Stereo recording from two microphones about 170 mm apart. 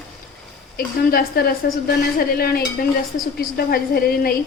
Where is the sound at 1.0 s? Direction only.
65° left (ahead or behind).